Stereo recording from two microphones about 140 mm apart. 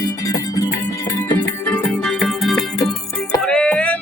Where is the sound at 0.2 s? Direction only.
25° left (ahead or behind).